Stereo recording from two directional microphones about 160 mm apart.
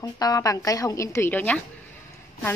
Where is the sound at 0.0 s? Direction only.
25° left (ahead or behind).